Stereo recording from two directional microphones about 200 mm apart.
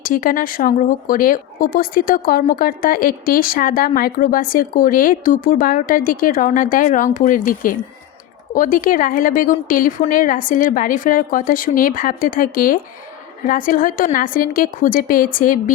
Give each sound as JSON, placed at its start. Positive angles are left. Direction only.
{"t": 0.0, "sound": "speech", "side_deg": 45}